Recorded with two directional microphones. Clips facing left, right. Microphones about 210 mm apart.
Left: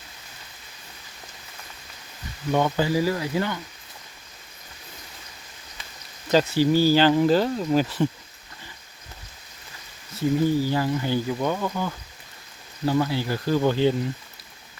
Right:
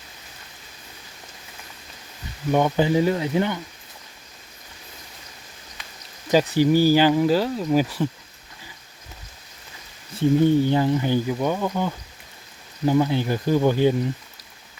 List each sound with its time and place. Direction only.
2.5 s speech: 15° right (ahead or behind)
6.2 s speech: 15° right (ahead or behind)
10.2 s speech: 25° right (ahead or behind)